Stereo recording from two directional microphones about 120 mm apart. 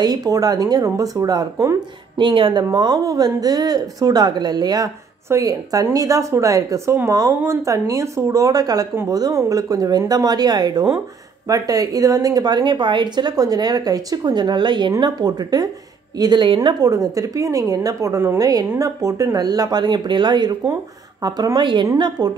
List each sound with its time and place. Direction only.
0.0 s speech: 30° right (ahead or behind)
2.1 s a woman's voice: 45° right (ahead or behind)
16.8 s speech: 30° right (ahead or behind)